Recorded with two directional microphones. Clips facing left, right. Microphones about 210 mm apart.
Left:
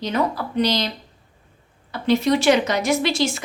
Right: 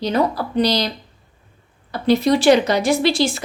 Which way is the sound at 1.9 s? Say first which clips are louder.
Right 3 dB; 35° right (ahead or behind).